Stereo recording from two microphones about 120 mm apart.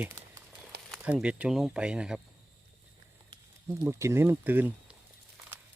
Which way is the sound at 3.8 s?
20° right (ahead or behind).